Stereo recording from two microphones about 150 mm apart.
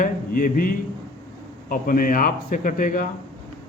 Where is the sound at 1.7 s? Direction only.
70° left (ahead or behind).